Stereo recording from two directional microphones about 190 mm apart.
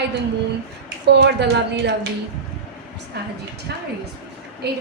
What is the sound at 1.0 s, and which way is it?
Speech, 65° right (ahead or behind).